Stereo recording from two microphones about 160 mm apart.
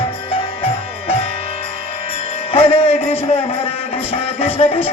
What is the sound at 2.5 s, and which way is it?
Speech, 35° left (ahead or behind).